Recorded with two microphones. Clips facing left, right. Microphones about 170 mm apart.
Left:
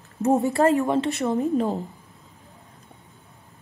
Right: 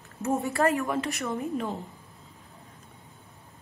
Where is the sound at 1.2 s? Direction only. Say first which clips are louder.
Left 8 dB; 35° left (ahead or behind).